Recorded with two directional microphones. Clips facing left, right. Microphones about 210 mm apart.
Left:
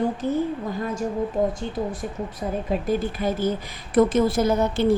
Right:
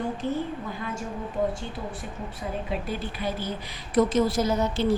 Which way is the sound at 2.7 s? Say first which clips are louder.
Left 7 dB; 45° left (ahead or behind).